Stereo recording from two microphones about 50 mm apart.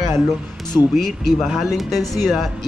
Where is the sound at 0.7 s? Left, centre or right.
Centre.